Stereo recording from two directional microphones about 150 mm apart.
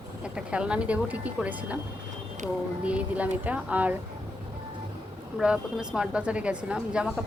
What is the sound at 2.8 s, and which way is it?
Speech, 10° right (ahead or behind).